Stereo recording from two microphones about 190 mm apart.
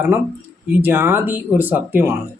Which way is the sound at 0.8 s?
10° right (ahead or behind).